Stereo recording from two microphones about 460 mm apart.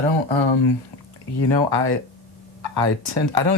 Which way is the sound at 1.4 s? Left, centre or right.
Right.